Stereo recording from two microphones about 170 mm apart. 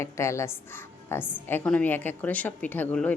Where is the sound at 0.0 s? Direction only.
15° left (ahead or behind).